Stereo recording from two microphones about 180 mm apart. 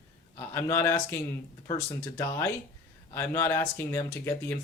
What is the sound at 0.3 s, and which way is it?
A man's voice, 15° left (ahead or behind).